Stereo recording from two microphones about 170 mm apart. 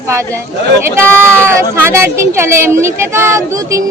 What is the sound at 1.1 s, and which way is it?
Speech, 15° right (ahead or behind).